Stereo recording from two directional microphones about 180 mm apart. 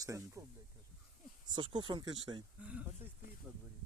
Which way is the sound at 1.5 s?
25° right (ahead or behind).